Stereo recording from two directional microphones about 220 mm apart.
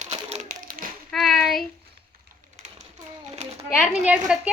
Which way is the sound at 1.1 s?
Centre (ahead or behind).